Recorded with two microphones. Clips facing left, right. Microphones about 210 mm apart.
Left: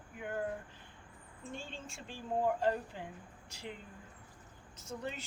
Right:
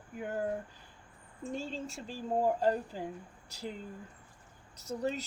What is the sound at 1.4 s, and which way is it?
Speech, 35° right (ahead or behind).